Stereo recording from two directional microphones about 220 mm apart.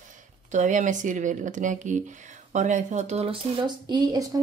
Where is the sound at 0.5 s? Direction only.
35° right (ahead or behind).